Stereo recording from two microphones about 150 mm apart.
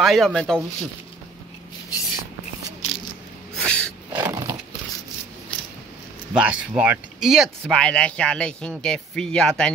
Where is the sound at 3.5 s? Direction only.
10° left (ahead or behind).